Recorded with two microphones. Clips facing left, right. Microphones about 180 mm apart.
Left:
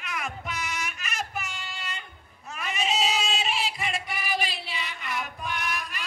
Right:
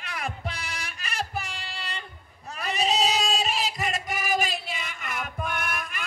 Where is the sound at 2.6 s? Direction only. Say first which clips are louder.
Right 3 dB; 35° right (ahead or behind).